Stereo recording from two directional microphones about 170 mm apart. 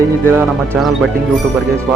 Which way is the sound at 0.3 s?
15° right (ahead or behind).